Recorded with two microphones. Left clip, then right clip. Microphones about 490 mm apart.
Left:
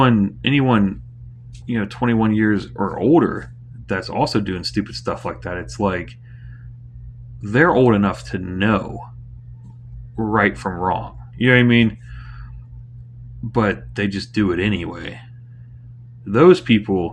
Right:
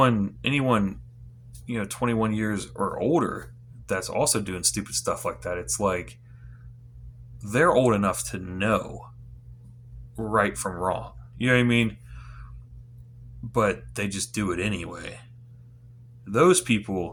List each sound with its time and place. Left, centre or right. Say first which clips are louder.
0.0 s speech: left 5 dB; right
7.4 s speech: left 6 dB; right
10.2 s speech: left 6 dB; right
13.5 s speech: left 4 dB; right
16.2 s speech: left 7 dB; right